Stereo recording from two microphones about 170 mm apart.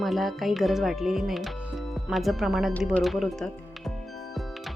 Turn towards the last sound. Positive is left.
turn(degrees=0)  # may be behind; listen again after turning